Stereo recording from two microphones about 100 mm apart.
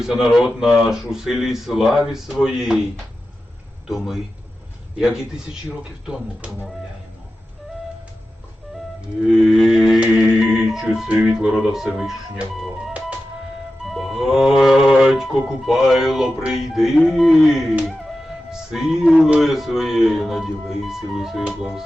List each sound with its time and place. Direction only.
0.0 s music: centre (ahead or behind)
3.8 s music: centre (ahead or behind)
4.9 s a man's voice: 5° right (ahead or behind)
9.2 s music: 5° right (ahead or behind)